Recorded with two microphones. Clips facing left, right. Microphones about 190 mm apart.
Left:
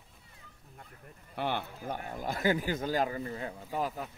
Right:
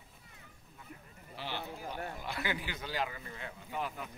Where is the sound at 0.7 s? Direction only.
55° left (ahead or behind).